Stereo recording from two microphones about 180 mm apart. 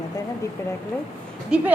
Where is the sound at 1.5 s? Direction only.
5° right (ahead or behind).